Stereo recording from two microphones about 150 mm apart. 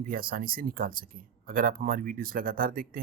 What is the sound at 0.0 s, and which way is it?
Speech, 75° right (ahead or behind).